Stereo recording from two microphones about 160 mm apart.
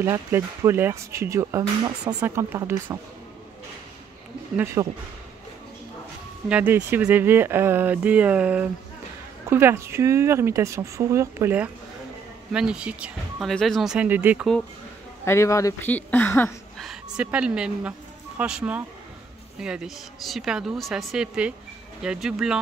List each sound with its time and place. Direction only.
0.0 s speech: 15° right (ahead or behind)
4.8 s speech: 25° right (ahead or behind)
6.5 s speech: 10° right (ahead or behind)
15.2 s speech: 20° left (ahead or behind)
16.7 s a woman's voice: centre (ahead or behind)